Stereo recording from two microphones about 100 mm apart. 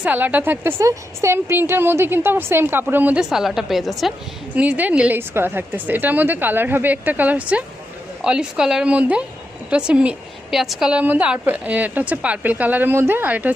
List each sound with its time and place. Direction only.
0.0 s a woman's voice: 15° right (ahead or behind)
3.2 s a woman's voice: 5° right (ahead or behind)
4.5 s a woman's voice: 15° right (ahead or behind)